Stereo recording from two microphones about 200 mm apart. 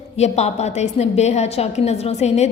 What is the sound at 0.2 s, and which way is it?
A woman's voice, 35° left (ahead or behind).